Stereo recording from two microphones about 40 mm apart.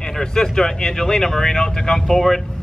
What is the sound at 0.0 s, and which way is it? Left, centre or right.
Speech, centre.